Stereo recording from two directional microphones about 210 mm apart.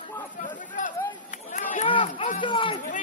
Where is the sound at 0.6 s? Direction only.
40° left (ahead or behind).